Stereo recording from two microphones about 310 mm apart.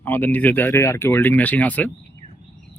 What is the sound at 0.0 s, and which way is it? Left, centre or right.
Speech, centre.